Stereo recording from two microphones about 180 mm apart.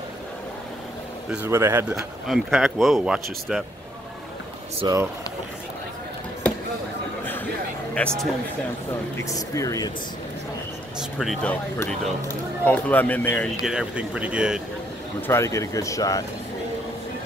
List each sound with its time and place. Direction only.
1.3 s speech: 10° right (ahead or behind)
2.2 s speech: centre (ahead or behind)
4.9 s speech: 25° right (ahead or behind)
8.0 s speech: 5° left (ahead or behind)
9.1 s speech: 15° left (ahead or behind)
11.0 s speech: centre (ahead or behind)
11.8 s speech: 10° left (ahead or behind)
13.6 s speech: 5° right (ahead or behind)
15.2 s speech: 15° left (ahead or behind)